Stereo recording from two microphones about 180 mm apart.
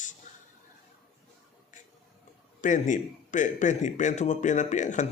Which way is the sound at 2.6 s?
45° left (ahead or behind).